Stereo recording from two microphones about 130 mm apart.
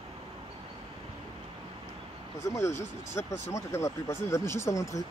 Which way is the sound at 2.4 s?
25° left (ahead or behind).